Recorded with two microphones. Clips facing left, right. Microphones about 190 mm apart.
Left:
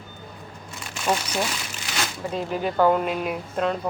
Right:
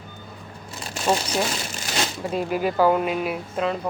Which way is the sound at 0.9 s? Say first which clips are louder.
Right 2 dB; 35° right (ahead or behind).